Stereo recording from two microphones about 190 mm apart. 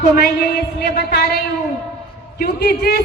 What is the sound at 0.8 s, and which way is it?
Speech, 55° left (ahead or behind).